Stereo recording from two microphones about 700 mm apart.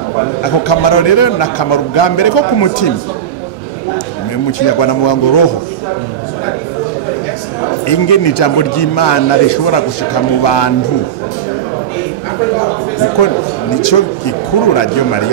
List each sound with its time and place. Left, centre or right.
0.4 s speech: left
4.5 s speech: left
7.8 s speech: left
13.2 s a man's voice: left